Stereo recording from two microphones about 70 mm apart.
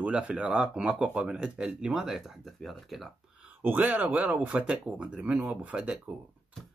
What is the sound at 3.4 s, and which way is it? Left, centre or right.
Speech, right.